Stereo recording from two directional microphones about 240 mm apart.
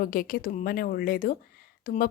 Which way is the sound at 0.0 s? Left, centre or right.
Left.